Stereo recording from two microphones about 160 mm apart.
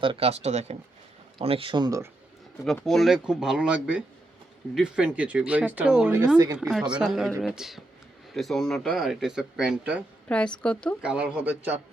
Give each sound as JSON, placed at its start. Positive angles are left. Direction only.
{"t": 0.0, "sound": "speech", "side_deg": -35}
{"t": 2.6, "sound": "speech", "side_deg": 0}
{"t": 10.2, "sound": "a woman's voice", "side_deg": 5}
{"t": 11.0, "sound": "speech", "side_deg": -5}